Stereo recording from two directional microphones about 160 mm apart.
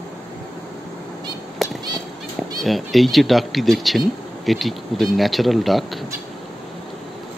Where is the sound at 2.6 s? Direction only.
Centre (ahead or behind).